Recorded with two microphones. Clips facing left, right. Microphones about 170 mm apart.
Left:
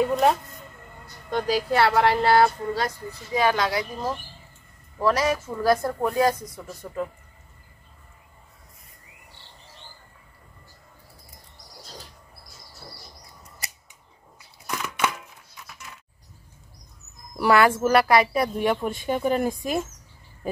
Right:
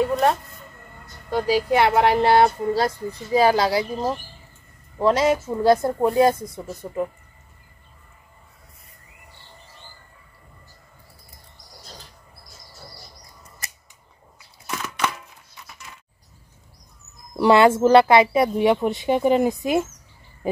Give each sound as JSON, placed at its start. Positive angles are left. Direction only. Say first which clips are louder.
{"t": 0.1, "sound": "music", "louder": "right 1 dB", "side_deg": 0}
{"t": 1.3, "sound": "speech", "louder": "right 3 dB", "side_deg": -10}
{"t": 14.8, "sound": "chopping", "louder": "even", "side_deg": 10}
{"t": 17.4, "sound": "speech", "louder": "right 4 dB", "side_deg": -25}